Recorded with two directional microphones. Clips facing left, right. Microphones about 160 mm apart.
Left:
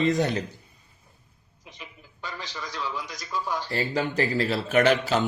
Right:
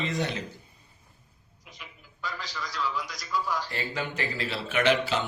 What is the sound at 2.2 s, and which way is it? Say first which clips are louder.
A man's voice: even; 20° left (ahead or behind).